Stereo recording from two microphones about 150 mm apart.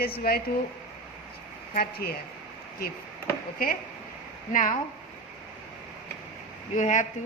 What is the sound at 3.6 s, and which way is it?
Speech, 75° left (ahead or behind).